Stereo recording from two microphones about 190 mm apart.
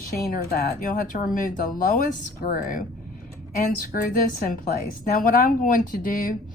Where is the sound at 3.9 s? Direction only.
45° left (ahead or behind).